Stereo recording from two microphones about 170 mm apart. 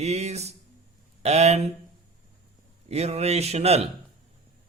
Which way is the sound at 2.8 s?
40° right (ahead or behind).